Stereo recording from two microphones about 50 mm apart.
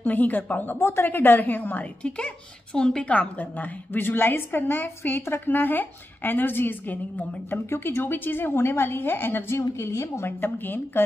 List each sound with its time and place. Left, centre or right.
0.0 s a woman's voice: left
2.0 s speech: left
3.1 s a woman's voice: left
7.7 s a woman's voice: left
9.6 s a woman's voice: left
10.2 s a woman's voice: left